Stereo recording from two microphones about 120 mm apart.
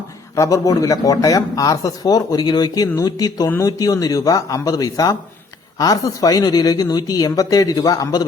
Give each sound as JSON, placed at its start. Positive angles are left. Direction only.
{"t": 0.3, "sound": "speech", "side_deg": 30}